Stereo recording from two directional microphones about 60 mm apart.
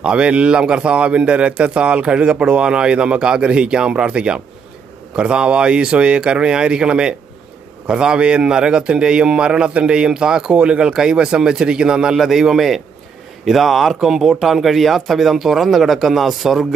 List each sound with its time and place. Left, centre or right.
0.0 s a man's voice: centre